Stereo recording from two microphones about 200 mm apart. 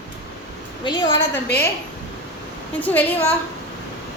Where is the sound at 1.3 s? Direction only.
10° left (ahead or behind).